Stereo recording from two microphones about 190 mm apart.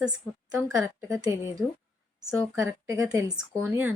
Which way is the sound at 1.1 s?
20° right (ahead or behind).